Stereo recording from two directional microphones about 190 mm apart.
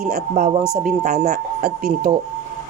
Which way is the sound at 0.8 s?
55° right (ahead or behind).